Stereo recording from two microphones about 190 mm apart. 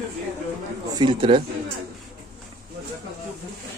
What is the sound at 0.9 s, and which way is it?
Speech, 25° right (ahead or behind).